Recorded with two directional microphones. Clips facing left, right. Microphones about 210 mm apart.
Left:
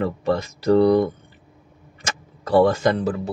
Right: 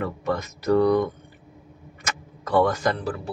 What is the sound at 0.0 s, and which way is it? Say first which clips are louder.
Speech: left 5 dB; 30° left (ahead or behind).